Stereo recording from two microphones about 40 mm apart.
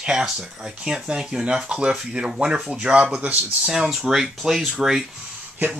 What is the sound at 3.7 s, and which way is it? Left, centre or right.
Speech, centre.